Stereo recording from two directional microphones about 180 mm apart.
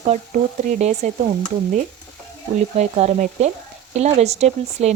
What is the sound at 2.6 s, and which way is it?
Speech, 40° right (ahead or behind).